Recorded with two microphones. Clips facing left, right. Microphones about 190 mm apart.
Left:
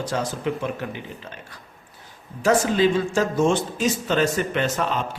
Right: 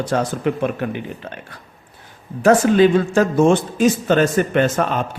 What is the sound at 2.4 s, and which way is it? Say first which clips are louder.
A man's voice: right 6 dB; 55° right (ahead or behind).